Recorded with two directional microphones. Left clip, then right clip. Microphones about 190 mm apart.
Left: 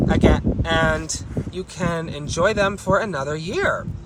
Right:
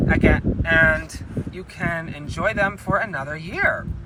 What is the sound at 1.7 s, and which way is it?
Speech, 20° left (ahead or behind).